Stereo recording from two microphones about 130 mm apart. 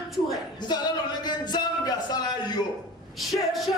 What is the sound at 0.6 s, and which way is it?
A man's voice, 35° left (ahead or behind).